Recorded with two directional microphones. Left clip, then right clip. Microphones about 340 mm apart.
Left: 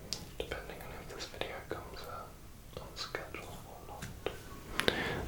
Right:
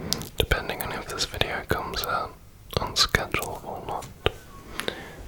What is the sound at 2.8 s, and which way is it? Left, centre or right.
Whispering, right.